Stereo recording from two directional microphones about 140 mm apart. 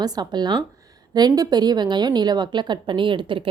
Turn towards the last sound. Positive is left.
turn(degrees=-35)  # may be behind; listen again after turning